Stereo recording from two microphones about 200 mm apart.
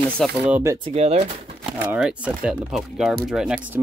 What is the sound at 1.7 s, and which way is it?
Speech, 5° right (ahead or behind).